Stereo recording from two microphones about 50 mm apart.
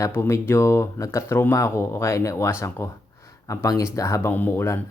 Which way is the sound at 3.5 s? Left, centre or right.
Left.